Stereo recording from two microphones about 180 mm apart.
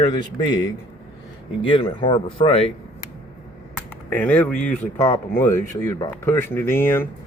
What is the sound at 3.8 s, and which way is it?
Speech, 10° left (ahead or behind).